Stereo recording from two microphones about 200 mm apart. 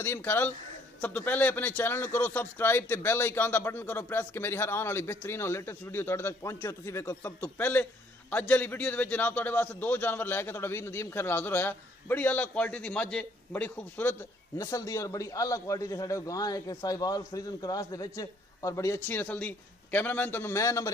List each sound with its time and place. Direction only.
0.0 s a man's voice: 10° left (ahead or behind)